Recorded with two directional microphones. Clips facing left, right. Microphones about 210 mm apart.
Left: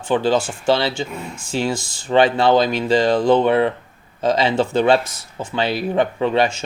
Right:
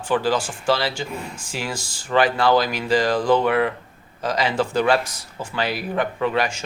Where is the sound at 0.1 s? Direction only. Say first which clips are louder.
Left 4 dB; 25° left (ahead or behind).